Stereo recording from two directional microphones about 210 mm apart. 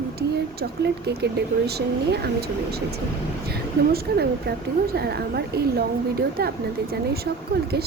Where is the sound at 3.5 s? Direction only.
50° right (ahead or behind).